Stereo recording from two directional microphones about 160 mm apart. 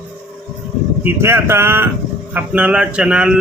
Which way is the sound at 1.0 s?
15° right (ahead or behind).